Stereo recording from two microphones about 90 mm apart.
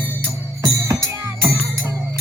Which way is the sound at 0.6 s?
35° right (ahead or behind).